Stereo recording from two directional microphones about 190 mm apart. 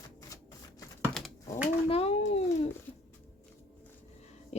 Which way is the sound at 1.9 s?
30° left (ahead or behind).